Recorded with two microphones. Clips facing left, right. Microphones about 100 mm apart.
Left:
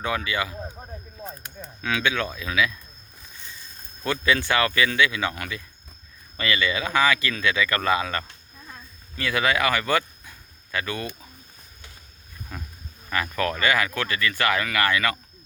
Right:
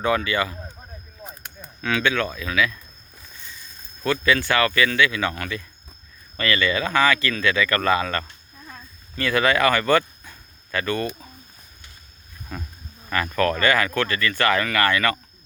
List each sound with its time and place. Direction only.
0.0 s speech: 5° left (ahead or behind)
1.2 s a sound: centre (ahead or behind)
1.8 s speech: 10° left (ahead or behind)
4.0 s speech: 20° left (ahead or behind)
12.5 s speech: 5° left (ahead or behind)